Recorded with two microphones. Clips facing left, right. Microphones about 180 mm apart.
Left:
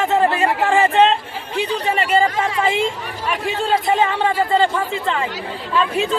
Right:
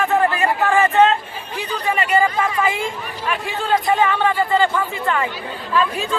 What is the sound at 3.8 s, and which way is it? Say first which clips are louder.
Speech: even; 25° left (ahead or behind).